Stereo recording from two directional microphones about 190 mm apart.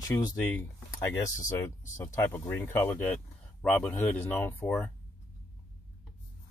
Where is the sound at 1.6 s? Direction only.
15° left (ahead or behind).